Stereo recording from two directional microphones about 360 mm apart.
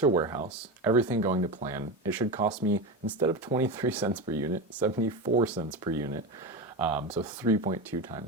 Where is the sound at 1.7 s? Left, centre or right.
Centre.